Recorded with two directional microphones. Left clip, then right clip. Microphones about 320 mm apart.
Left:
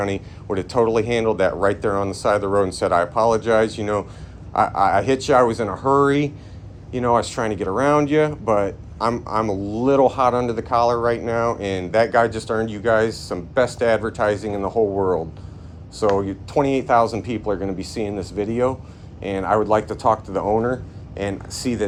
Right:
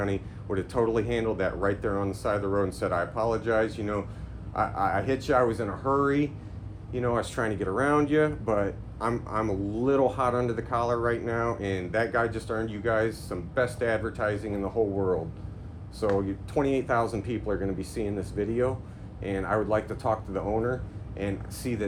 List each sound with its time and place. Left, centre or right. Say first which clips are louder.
0.0 s speech: left 6 dB; centre